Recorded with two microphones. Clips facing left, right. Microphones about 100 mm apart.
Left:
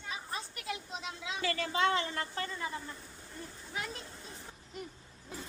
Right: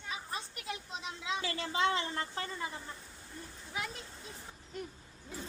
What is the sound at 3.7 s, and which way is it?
Speech, 5° right (ahead or behind).